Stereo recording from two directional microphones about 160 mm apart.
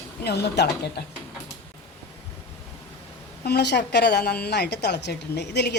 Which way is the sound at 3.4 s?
90° left.